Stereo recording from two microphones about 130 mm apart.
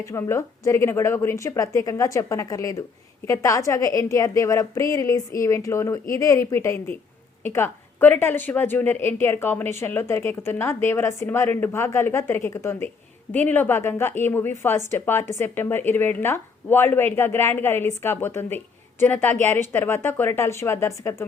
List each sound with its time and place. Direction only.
0.0 s a woman's voice: 20° left (ahead or behind)